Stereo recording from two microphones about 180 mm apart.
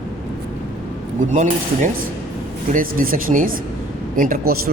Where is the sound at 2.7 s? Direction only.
50° right (ahead or behind).